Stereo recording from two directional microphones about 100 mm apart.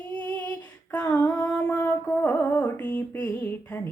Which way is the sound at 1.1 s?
15° left (ahead or behind).